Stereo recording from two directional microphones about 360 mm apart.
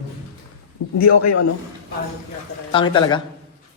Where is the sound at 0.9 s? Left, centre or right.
Left.